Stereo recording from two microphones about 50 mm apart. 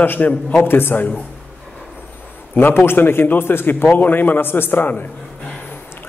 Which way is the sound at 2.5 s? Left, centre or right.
Left.